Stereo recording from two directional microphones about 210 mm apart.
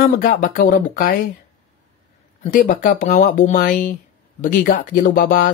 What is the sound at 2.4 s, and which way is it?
Speech, 40° left (ahead or behind).